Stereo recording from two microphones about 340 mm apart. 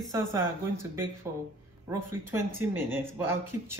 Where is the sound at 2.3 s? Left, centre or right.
Centre.